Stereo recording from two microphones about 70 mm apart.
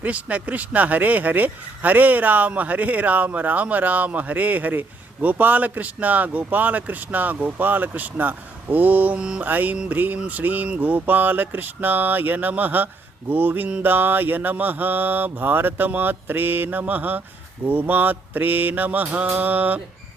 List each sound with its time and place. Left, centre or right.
0.0 s speech: right